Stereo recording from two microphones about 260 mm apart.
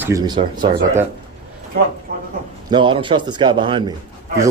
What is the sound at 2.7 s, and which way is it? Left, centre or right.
A man's voice, centre.